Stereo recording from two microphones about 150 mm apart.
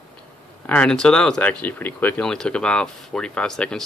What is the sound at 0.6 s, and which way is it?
Speech, 10° left (ahead or behind).